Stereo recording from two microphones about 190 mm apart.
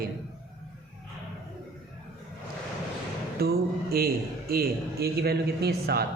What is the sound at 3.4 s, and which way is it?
A man's voice, 55° right (ahead or behind).